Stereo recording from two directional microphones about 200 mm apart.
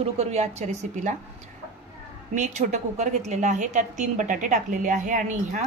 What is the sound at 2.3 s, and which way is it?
A woman's voice, 35° right (ahead or behind).